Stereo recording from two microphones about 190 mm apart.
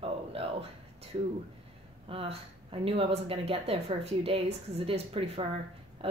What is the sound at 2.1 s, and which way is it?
Speech, 30° right (ahead or behind).